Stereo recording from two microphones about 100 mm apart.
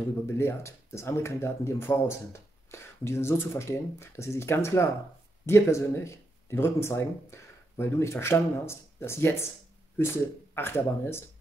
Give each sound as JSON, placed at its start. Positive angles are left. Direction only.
{"t": 0.3, "sound": "speech", "side_deg": 25}